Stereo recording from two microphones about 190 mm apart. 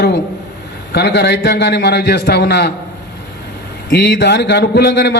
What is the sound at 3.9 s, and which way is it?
A man's voice, 65° left (ahead or behind).